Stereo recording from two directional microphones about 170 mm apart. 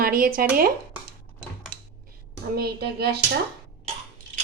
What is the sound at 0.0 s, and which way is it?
Speech, 60° right (ahead or behind).